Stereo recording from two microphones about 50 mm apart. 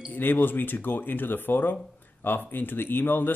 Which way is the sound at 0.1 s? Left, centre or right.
Left.